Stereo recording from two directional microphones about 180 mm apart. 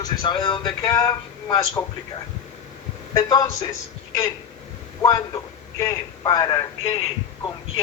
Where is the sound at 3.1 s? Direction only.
20° left (ahead or behind).